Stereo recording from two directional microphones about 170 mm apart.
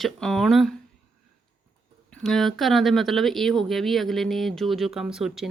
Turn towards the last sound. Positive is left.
turn(degrees=-5)  # may be behind; listen again after turning